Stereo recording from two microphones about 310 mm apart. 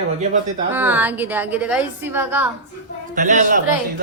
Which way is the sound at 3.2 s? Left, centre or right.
Right.